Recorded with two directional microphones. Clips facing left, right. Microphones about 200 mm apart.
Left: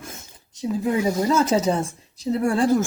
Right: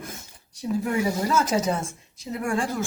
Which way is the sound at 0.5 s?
20° left (ahead or behind).